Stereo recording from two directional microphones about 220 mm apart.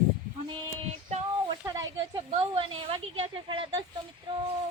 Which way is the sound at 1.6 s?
15° right (ahead or behind).